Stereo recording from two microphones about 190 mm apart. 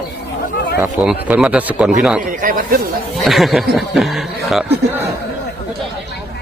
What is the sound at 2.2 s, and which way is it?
Speech, 45° right (ahead or behind).